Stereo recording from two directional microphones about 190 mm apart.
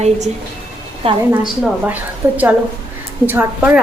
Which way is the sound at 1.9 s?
10° right (ahead or behind).